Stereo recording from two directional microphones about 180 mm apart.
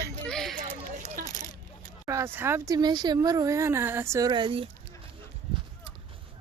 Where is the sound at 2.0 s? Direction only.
15° right (ahead or behind).